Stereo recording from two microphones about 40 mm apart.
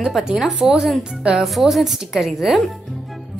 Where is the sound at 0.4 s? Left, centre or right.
Centre.